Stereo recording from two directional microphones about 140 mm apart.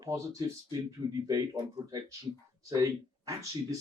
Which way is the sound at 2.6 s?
25° right (ahead or behind).